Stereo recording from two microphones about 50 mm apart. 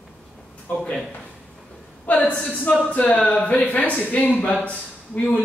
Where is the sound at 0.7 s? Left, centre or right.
Left.